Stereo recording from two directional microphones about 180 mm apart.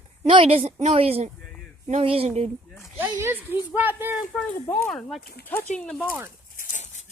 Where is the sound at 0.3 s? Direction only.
30° right (ahead or behind).